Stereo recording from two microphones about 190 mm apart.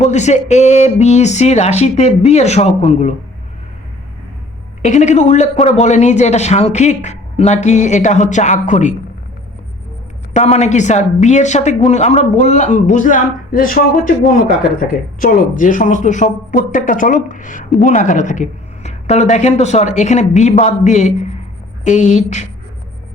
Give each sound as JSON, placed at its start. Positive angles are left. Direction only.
{"t": 0.0, "sound": "speech", "side_deg": 35}
{"t": 4.8, "sound": "speech", "side_deg": 40}
{"t": 10.3, "sound": "speech", "side_deg": 35}